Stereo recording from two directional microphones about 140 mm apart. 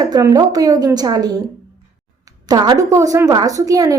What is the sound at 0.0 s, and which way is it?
A woman's voice, 25° right (ahead or behind).